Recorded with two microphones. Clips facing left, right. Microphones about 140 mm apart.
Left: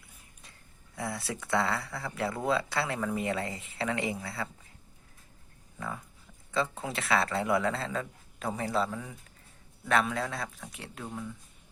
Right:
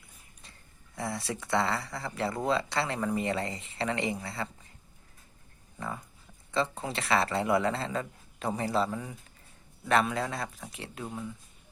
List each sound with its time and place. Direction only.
0.9 s speech: centre (ahead or behind)
6.5 s speech: 5° left (ahead or behind)